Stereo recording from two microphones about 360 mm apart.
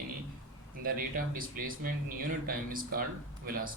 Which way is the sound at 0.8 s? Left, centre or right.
Right.